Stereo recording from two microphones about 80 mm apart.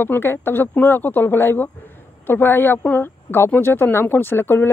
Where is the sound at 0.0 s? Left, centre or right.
Left.